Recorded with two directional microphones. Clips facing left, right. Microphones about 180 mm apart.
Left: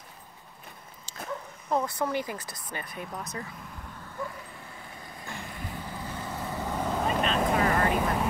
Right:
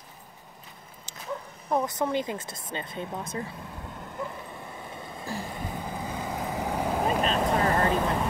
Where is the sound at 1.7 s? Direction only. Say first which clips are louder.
Right 2 dB; 20° right (ahead or behind).